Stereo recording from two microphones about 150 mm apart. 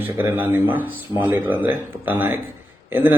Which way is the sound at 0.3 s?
15° right (ahead or behind).